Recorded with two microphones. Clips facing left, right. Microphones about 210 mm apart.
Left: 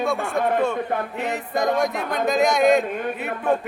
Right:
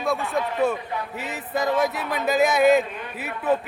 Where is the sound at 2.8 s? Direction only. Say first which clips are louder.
Left 8 dB; 50° left (ahead or behind).